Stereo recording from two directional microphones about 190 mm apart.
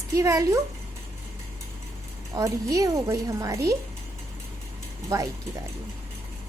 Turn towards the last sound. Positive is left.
turn(degrees=-15)  # may be behind; listen again after turning